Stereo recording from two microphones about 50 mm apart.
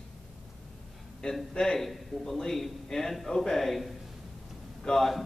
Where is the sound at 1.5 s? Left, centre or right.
Centre.